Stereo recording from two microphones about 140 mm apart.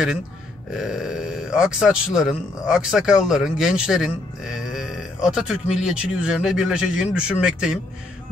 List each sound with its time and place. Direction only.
0.7 s speech: 5° right (ahead or behind)